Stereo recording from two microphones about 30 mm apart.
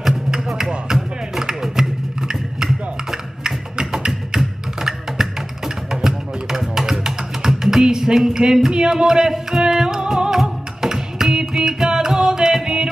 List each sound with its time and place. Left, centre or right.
0.3 s music: centre
1.4 s a sound: centre
4.8 s music: centre